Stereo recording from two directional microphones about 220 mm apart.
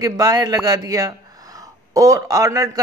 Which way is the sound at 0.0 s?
15° right (ahead or behind).